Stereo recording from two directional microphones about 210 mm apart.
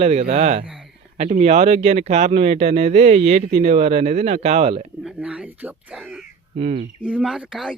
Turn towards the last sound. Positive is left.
turn(degrees=-5)  # may be behind; listen again after turning